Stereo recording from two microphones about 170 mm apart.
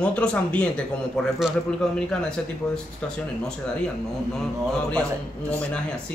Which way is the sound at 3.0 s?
5° left (ahead or behind).